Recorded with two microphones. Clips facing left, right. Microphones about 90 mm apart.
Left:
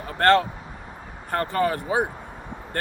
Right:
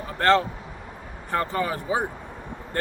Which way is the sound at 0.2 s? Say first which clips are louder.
Left 2 dB; 55° left (ahead or behind).